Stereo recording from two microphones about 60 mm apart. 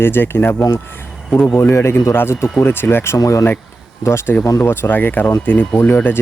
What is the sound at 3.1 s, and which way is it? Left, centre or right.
Speech, left.